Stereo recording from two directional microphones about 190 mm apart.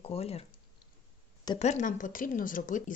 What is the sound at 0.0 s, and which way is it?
Speech, 30° left (ahead or behind).